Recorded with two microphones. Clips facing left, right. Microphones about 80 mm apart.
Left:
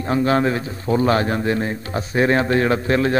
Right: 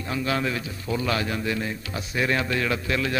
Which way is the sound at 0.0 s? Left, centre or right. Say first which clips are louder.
Left 9 dB; left.